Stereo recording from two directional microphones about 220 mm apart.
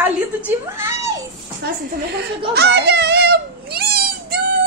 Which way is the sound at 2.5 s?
50° right (ahead or behind).